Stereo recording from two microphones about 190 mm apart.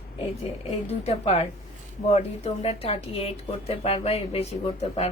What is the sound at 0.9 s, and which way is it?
Speech, 35° left (ahead or behind).